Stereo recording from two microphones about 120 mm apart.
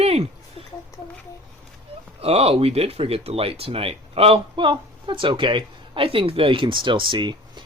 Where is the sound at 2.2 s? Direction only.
55° right (ahead or behind); by 7.6 s 40° right (ahead or behind).